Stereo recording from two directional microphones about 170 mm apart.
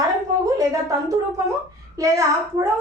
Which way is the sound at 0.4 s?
20° right (ahead or behind).